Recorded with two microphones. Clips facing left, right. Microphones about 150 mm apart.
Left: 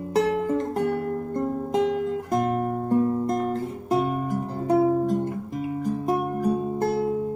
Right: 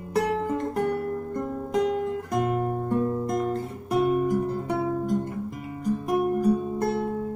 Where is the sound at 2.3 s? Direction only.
40° left (ahead or behind).